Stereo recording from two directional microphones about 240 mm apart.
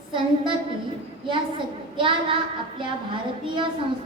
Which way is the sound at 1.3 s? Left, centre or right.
Right.